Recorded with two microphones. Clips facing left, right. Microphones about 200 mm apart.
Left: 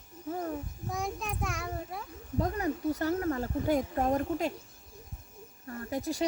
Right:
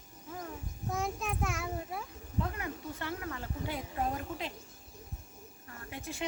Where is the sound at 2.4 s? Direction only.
40° left (ahead or behind).